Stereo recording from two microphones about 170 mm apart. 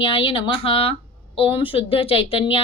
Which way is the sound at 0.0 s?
30° left (ahead or behind).